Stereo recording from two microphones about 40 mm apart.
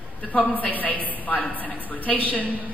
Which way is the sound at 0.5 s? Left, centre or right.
Left.